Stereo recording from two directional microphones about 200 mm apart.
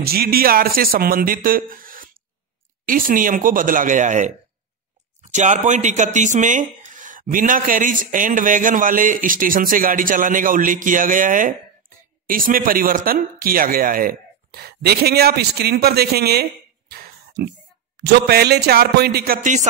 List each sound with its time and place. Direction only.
0.0 s speech: 50° right (ahead or behind)
16.9 s a sound: 50° right (ahead or behind)
17.9 s speech: 55° right (ahead or behind)